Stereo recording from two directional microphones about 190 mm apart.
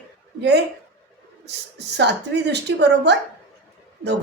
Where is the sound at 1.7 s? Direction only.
65° right (ahead or behind).